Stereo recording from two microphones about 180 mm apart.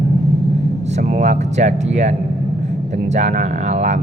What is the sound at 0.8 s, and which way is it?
A man's voice, 45° right (ahead or behind).